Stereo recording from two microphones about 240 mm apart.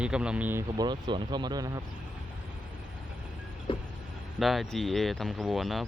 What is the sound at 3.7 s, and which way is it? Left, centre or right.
Vehicle, left.